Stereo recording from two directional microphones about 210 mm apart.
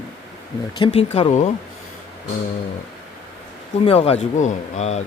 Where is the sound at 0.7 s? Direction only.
25° left (ahead or behind).